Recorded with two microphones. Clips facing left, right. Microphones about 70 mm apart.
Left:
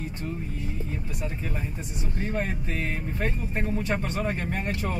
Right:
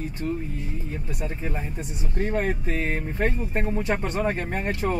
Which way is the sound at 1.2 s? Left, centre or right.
Right.